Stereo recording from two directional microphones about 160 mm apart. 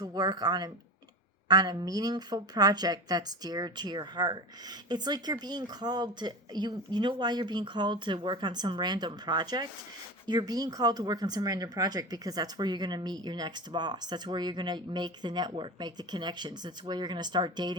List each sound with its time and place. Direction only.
0.0 s speech: 25° right (ahead or behind)